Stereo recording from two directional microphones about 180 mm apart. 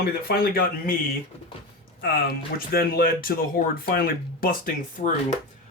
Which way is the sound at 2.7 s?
55° left (ahead or behind).